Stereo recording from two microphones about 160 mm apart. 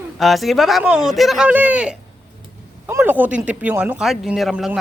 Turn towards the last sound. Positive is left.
turn(degrees=0)  # may be behind; listen again after turning